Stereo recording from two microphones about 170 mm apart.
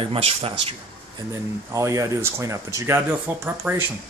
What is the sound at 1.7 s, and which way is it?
Speech, 20° right (ahead or behind).